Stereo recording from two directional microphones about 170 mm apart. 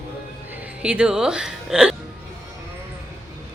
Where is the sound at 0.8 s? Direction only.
5° right (ahead or behind).